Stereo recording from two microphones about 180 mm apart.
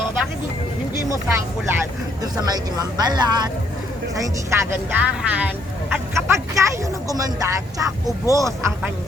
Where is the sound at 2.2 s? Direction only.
20° right (ahead or behind).